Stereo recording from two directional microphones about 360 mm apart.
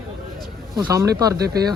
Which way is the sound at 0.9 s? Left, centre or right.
Centre.